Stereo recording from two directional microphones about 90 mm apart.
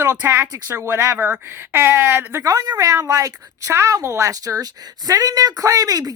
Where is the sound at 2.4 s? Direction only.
45° right (ahead or behind).